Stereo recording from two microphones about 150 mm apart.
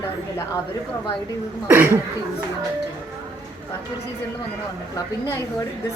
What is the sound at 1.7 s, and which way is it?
Speech, 15° right (ahead or behind).